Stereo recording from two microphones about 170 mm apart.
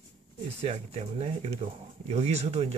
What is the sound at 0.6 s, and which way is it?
Speech, 35° right (ahead or behind).